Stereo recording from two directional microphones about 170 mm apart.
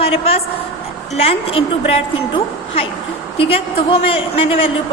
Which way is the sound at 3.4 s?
35° left (ahead or behind).